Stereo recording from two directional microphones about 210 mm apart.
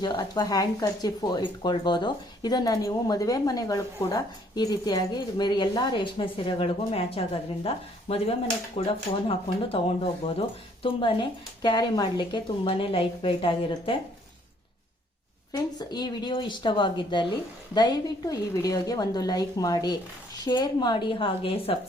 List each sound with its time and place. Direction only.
0.0 s speech: 20° left (ahead or behind)
15.5 s speech: 20° left (ahead or behind)